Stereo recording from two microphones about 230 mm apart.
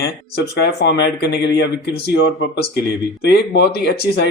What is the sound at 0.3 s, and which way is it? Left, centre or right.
Speech, left.